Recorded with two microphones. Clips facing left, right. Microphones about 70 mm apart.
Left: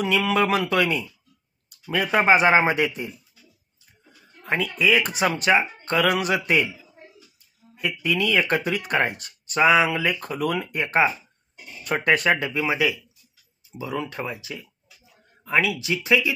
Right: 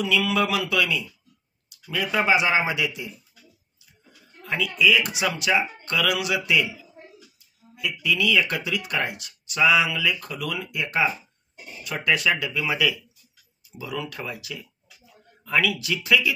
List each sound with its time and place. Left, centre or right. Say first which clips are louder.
0.0 s speech: left 2 dB; left
4.5 s speech: even; left
7.7 s speech: left 1 dB; left